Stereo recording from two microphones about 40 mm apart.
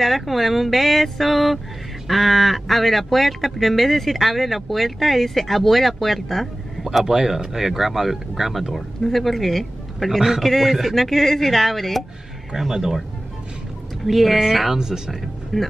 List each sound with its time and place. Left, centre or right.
0.0 s speech: centre
12.5 s speech: centre
14.0 s speech: centre